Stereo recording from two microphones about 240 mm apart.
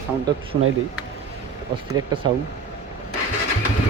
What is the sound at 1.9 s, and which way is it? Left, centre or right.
Speech, centre.